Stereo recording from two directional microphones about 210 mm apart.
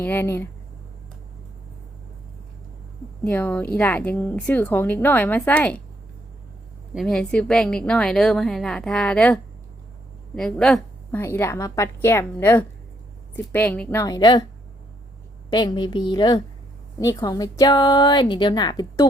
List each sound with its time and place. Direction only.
0.0 s a woman's voice: 10° left (ahead or behind)
3.2 s a woman's voice: 10° left (ahead or behind)
6.9 s a woman's voice: centre (ahead or behind); by 14.4 s 20° left (ahead or behind)
15.4 s a woman's voice: 20° left (ahead or behind)